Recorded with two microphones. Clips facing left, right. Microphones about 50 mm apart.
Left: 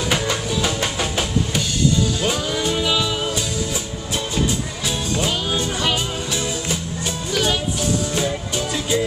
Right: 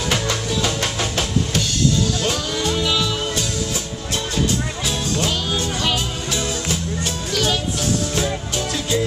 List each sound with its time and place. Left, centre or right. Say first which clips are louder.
0.1 s music: even; centre
4.8 s music: left 2 dB; centre
8.1 s music: even; centre